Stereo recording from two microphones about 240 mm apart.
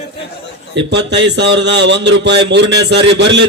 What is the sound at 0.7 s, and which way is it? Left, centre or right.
Speech, right.